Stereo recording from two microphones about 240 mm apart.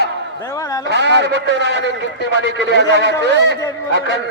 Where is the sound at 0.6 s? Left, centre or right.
Centre.